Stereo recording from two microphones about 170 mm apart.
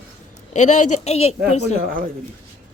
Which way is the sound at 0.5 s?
45° left (ahead or behind).